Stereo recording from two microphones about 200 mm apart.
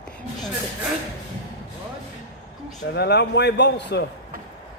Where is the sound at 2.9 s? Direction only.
55° left (ahead or behind).